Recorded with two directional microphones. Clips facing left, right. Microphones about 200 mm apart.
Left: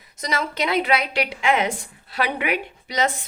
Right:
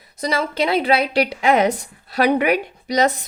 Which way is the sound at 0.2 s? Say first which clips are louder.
Right 5 dB; 35° right (ahead or behind).